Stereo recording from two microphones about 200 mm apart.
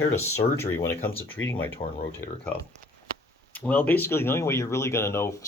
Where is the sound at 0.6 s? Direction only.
10° left (ahead or behind).